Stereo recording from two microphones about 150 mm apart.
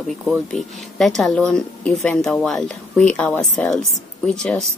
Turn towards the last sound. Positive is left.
turn(degrees=5)  # may be behind; listen again after turning